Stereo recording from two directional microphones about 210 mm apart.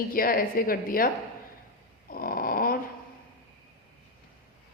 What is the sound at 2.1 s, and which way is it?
Snoring, 45° left (ahead or behind).